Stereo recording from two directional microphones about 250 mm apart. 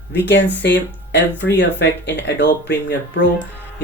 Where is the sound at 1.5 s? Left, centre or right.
Left.